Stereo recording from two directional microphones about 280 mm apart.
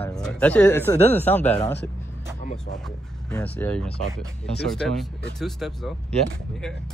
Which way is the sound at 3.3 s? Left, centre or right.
Centre.